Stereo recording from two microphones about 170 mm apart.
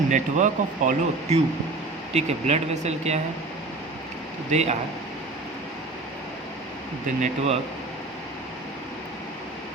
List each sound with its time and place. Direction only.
0.1 s speech: 45° right (ahead or behind)
4.5 s speech: 40° right (ahead or behind)
7.2 s speech: 40° right (ahead or behind)